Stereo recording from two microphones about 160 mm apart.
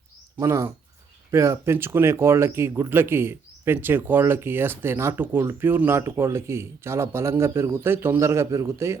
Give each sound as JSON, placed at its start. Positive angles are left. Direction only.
{"t": 0.3, "sound": "speech", "side_deg": -20}